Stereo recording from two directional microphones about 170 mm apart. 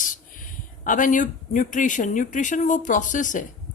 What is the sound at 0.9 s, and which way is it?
Speech, 50° left (ahead or behind).